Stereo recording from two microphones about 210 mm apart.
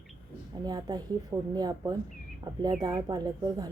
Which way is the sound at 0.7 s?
20° right (ahead or behind).